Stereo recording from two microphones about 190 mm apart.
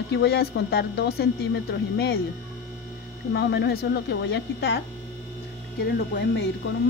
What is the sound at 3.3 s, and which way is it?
Speech, 65° left (ahead or behind).